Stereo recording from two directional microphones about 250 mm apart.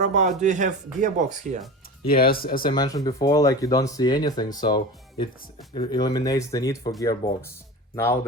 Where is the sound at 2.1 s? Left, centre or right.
Left.